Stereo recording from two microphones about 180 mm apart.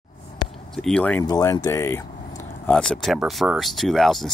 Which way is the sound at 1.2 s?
20° left (ahead or behind).